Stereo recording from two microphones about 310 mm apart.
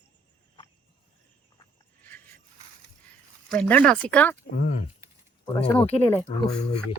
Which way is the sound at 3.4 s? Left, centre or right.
Centre.